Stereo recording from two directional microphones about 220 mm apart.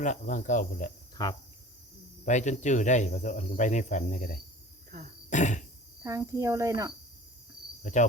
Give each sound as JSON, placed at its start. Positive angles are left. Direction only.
{"t": 0.0, "sound": "cricket", "side_deg": 35}
{"t": 1.1, "sound": "cricket", "side_deg": 15}
{"t": 2.2, "sound": "cricket", "side_deg": 35}
{"t": 5.3, "sound": "cough", "side_deg": 35}
{"t": 6.0, "sound": "speech", "side_deg": -15}
{"t": 7.8, "sound": "insect", "side_deg": 35}